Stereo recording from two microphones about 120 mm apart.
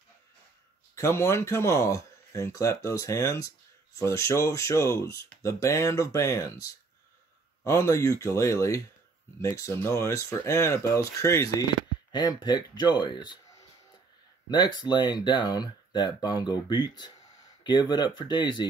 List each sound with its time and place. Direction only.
0.9 s speech: 20° left (ahead or behind)
12.1 s speech: 35° left (ahead or behind)
14.5 s speech: 35° left (ahead or behind)